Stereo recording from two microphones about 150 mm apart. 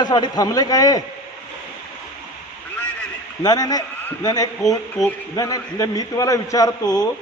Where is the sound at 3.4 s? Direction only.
25° left (ahead or behind).